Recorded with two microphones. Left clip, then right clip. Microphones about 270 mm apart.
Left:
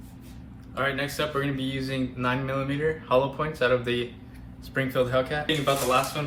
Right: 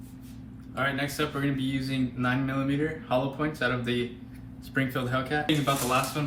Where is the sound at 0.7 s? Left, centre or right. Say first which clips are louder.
Left 1 dB; centre.